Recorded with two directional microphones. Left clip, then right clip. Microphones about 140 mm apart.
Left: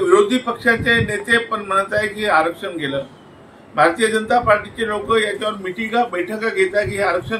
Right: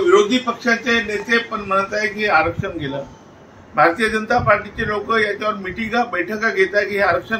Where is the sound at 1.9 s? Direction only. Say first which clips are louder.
Even; 5° left (ahead or behind).